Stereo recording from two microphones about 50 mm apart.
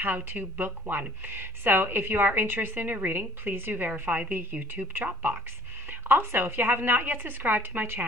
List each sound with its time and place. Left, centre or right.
0.0 s a woman's voice: right